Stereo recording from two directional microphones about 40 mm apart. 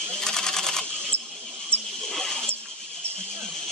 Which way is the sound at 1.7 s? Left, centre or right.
Left.